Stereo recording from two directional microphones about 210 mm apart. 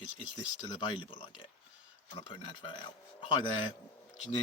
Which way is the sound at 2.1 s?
20° left (ahead or behind).